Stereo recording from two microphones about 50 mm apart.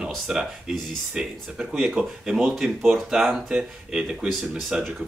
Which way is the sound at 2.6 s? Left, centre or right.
Centre.